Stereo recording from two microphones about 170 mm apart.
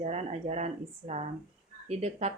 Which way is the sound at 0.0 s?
40° right (ahead or behind).